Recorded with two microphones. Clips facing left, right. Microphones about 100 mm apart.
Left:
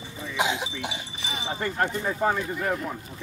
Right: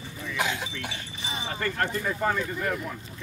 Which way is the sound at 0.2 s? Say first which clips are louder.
Left 3 dB; 20° left (ahead or behind).